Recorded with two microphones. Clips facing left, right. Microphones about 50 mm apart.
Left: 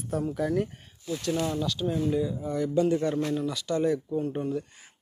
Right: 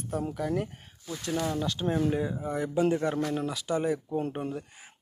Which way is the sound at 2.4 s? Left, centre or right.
Right.